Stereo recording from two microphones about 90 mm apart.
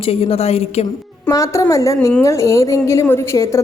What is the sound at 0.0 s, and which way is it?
Speech, 90° left.